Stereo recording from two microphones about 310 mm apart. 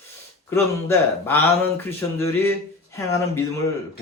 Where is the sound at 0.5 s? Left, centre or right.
Centre.